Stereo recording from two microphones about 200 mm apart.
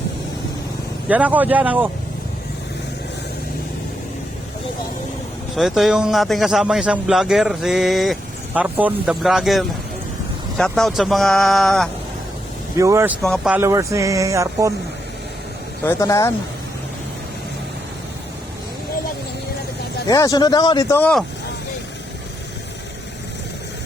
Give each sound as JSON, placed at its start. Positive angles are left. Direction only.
{"t": 1.0, "sound": "speech", "side_deg": -5}
{"t": 5.5, "sound": "speech", "side_deg": 0}
{"t": 12.7, "sound": "speech", "side_deg": -15}
{"t": 13.2, "sound": "speech", "side_deg": 0}
{"t": 13.6, "sound": "speech", "side_deg": -15}
{"t": 15.8, "sound": "speech", "side_deg": 15}
{"t": 20.1, "sound": "speech", "side_deg": 15}